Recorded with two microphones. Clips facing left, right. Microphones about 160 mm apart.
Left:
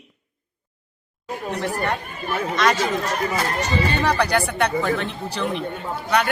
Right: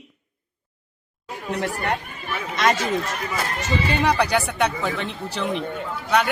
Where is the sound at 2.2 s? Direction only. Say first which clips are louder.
Left 6 dB; 45° left (ahead or behind).